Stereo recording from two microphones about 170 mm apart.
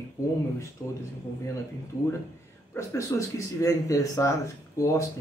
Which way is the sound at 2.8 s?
20° left (ahead or behind).